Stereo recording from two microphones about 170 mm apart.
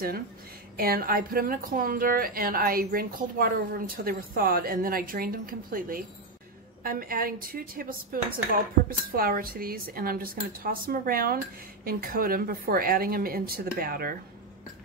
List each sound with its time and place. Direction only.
0.7 s a woman's voice: 60° right (ahead or behind)